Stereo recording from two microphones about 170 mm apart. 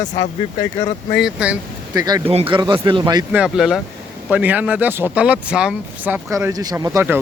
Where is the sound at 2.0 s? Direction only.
20° right (ahead or behind).